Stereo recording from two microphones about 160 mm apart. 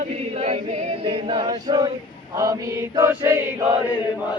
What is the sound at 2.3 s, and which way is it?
Chant, 20° right (ahead or behind).